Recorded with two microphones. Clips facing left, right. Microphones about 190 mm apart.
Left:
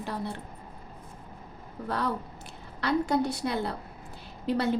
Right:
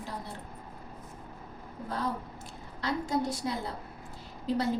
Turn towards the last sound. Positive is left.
turn(degrees=70)  # may be behind; listen again after turning